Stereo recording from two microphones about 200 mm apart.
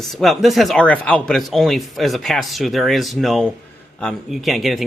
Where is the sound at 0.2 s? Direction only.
Centre (ahead or behind).